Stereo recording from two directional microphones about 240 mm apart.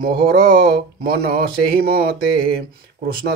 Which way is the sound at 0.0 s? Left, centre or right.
Right.